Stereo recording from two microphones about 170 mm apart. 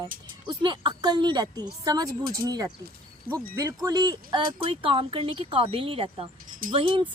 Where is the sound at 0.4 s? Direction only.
30° right (ahead or behind).